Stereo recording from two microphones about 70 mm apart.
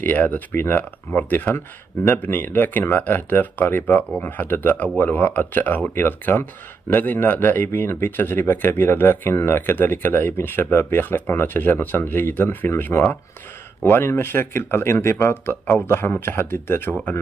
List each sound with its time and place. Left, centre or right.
0.0 s speech: left